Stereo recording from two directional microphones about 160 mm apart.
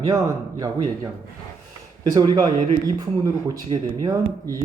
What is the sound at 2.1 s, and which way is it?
Speech, 25° right (ahead or behind).